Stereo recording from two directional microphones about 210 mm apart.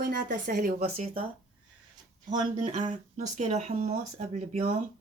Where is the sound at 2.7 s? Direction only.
35° right (ahead or behind).